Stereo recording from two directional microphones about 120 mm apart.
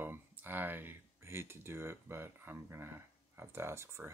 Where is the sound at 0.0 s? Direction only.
15° right (ahead or behind).